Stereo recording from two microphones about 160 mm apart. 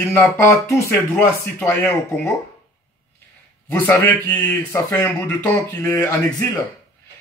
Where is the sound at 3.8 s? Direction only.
10° left (ahead or behind).